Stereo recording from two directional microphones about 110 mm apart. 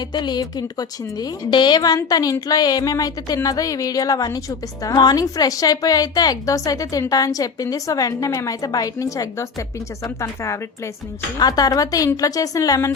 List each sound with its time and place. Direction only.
0.1 s a woman's voice: 40° left (ahead or behind)